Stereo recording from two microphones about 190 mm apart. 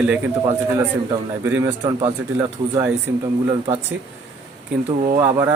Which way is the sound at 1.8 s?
30° right (ahead or behind).